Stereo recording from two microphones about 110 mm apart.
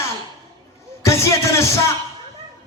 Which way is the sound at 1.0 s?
25° left (ahead or behind).